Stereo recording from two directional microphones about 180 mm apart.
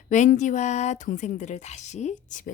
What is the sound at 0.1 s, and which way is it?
Speech, 40° left (ahead or behind).